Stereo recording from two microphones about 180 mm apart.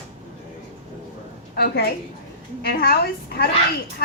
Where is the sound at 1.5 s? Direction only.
60° left (ahead or behind).